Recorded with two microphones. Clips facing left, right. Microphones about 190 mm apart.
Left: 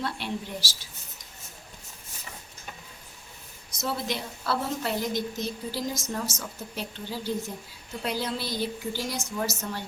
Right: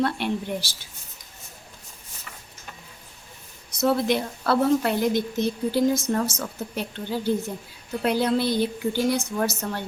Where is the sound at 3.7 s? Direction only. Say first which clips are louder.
Right 9 dB; 60° right (ahead or behind).